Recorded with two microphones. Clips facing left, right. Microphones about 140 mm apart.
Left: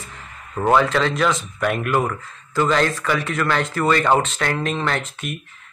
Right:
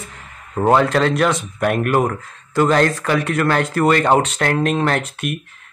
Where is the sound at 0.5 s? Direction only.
30° right (ahead or behind).